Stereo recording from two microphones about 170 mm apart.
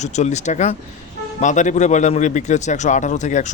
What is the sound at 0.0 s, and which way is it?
A man's voice, 45° left (ahead or behind).